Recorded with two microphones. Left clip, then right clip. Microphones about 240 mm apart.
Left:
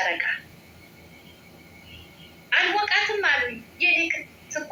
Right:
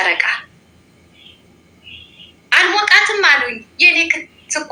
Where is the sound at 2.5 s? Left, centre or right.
Right.